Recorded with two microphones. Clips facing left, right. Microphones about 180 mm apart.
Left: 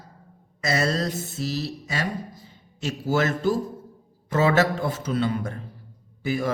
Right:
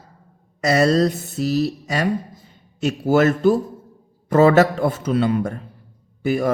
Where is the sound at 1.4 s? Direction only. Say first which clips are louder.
Right 9 dB; 65° right (ahead or behind).